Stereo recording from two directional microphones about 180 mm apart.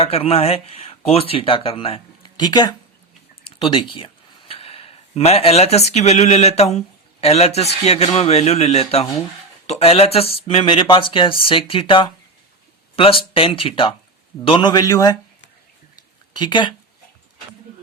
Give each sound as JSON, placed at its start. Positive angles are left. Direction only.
{"t": 0.0, "sound": "speech", "side_deg": 35}
{"t": 16.3, "sound": "speech", "side_deg": 25}